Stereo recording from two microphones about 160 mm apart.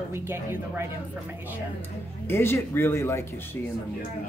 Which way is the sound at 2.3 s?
15° left (ahead or behind).